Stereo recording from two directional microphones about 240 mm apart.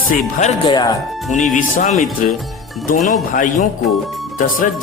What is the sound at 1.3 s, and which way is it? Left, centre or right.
Speech, left.